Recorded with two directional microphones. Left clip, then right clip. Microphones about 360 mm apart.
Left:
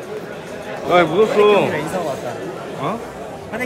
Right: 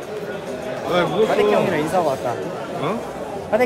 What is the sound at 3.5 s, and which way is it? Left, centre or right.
Speech, centre.